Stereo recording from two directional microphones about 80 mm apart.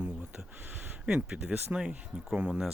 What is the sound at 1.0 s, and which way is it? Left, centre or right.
Speech, centre.